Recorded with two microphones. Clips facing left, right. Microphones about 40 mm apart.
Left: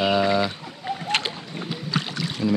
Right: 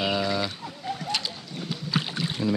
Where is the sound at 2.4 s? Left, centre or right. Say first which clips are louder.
Left 4 dB; left.